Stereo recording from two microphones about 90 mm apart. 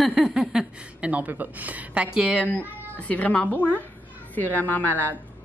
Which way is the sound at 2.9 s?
15° left (ahead or behind).